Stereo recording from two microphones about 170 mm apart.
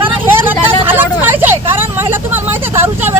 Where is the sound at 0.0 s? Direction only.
10° right (ahead or behind).